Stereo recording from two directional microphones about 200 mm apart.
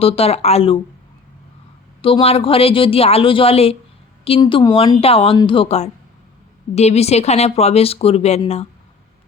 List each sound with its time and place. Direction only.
0.0 s speech: 30° left (ahead or behind)
2.0 s speech: 25° left (ahead or behind)